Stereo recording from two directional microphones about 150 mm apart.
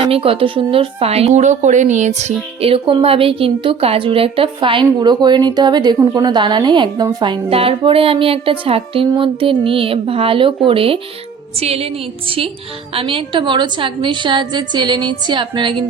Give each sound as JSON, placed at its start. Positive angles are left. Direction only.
{"t": 0.0, "sound": "speech", "side_deg": -40}
{"t": 2.6, "sound": "a woman's voice", "side_deg": -40}